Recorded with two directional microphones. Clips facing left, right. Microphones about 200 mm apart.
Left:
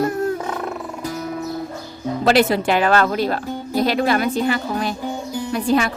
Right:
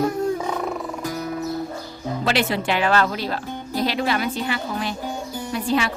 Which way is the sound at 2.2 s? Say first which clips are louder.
Left 7 dB; 40° left (ahead or behind).